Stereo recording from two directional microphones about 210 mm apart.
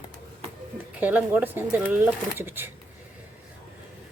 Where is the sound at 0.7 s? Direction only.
10° right (ahead or behind).